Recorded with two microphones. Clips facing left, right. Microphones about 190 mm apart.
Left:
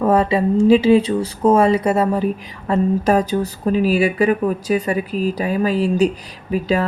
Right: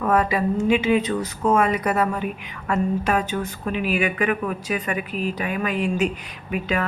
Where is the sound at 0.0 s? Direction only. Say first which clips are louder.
Left 5 dB; 30° left (ahead or behind).